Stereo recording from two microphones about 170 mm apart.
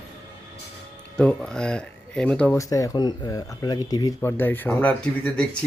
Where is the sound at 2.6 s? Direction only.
20° left (ahead or behind).